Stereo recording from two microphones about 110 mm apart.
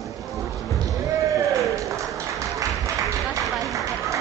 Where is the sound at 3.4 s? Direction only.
Centre (ahead or behind).